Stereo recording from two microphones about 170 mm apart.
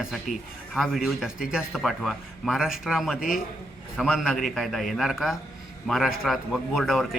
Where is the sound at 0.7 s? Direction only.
Centre (ahead or behind).